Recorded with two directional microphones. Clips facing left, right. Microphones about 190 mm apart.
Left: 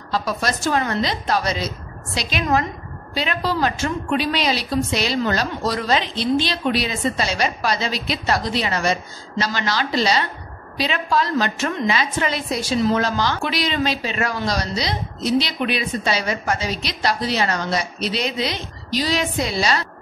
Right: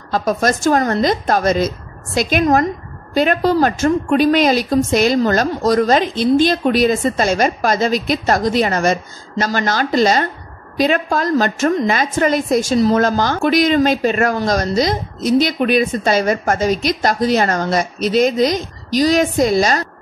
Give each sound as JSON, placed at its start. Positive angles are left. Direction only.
{"t": 0.1, "sound": "a woman's voice", "side_deg": -50}